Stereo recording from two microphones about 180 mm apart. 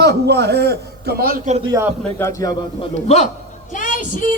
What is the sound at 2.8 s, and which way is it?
Speech, 35° left (ahead or behind).